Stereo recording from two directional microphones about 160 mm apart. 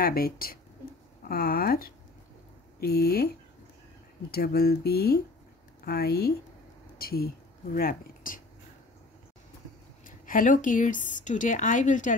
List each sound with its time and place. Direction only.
0.0 s speech: 70° left (ahead or behind)
10.0 s speech: 55° left (ahead or behind)